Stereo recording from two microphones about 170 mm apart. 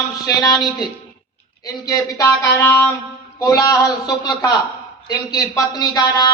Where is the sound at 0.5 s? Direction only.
Centre (ahead or behind).